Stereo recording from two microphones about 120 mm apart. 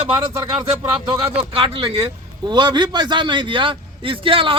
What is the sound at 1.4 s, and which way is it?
A man's voice, 50° right (ahead or behind).